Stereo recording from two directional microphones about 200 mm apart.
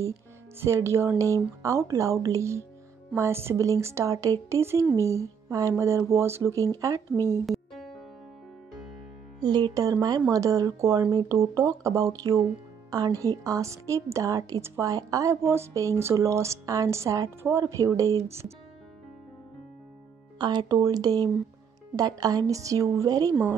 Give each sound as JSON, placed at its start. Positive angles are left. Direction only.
{"t": 0.6, "sound": "speech", "side_deg": -15}
{"t": 7.4, "sound": "music", "side_deg": 0}
{"t": 9.4, "sound": "speech", "side_deg": -20}
{"t": 20.3, "sound": "speech", "side_deg": -20}